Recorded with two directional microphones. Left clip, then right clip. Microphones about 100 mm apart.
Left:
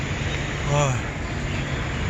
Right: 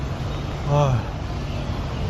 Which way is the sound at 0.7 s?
30° right (ahead or behind).